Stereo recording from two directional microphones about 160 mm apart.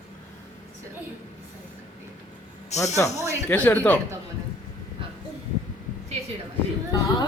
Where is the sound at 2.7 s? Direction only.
45° left (ahead or behind).